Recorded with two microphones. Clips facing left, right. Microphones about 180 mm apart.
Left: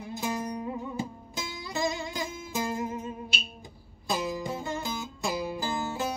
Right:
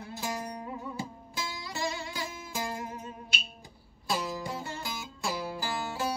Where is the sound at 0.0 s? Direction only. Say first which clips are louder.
Left 4 dB; 20° left (ahead or behind).